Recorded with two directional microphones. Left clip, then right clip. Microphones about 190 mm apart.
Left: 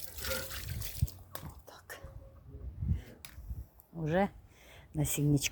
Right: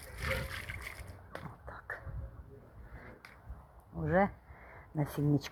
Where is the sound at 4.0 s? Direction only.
25° left (ahead or behind).